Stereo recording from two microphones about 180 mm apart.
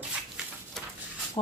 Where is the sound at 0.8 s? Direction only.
Centre (ahead or behind).